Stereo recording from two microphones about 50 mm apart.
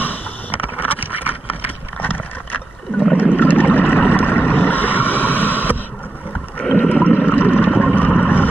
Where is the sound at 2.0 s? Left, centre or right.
Left.